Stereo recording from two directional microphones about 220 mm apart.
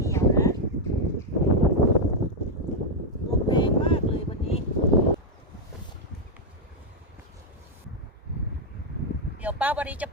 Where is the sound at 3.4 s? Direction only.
20° left (ahead or behind).